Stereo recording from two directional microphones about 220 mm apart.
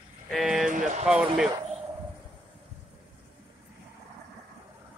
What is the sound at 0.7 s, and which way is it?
Speech, 35° right (ahead or behind).